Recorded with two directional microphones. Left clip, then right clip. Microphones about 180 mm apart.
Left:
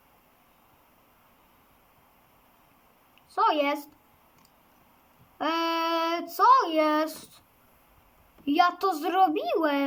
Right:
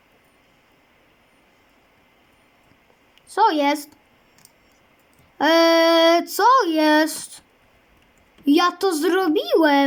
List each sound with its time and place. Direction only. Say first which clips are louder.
3.2 s speech: right 6 dB; 35° right (ahead or behind)
5.4 s speech: right 12 dB; 35° right (ahead or behind)
8.4 s speech: right 5 dB; 35° right (ahead or behind)